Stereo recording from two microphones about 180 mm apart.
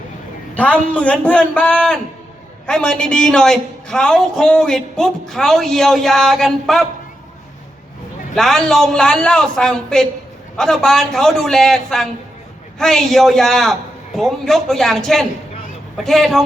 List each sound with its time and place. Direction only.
0.5 s a man's voice: 10° left (ahead or behind)
8.4 s a man's voice: centre (ahead or behind)